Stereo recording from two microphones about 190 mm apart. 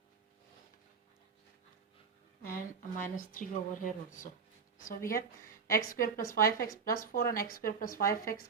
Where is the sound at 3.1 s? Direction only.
45° left (ahead or behind).